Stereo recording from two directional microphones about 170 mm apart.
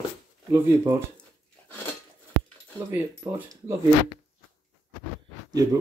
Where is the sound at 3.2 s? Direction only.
20° right (ahead or behind).